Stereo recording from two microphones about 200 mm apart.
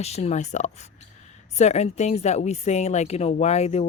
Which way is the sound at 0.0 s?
30° left (ahead or behind).